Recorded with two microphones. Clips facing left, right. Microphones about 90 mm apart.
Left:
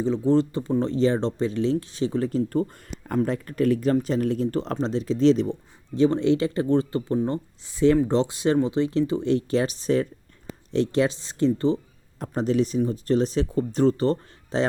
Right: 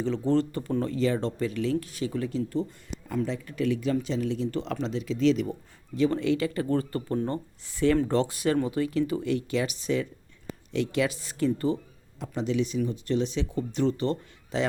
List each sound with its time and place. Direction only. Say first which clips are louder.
0.0 s speech: left 4 dB; 20° left (ahead or behind); by 2.4 s 35° left (ahead or behind)
2.5 s speech: left 5 dB; 50° left (ahead or behind); by 11.8 s 30° left (ahead or behind)
12.2 s speech: left 5 dB; 40° left (ahead or behind)